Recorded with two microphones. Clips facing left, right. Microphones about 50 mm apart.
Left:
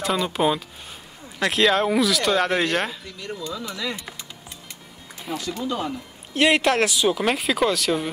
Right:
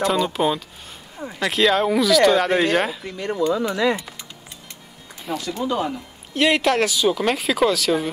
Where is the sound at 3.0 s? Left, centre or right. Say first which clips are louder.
Right 10 dB; right.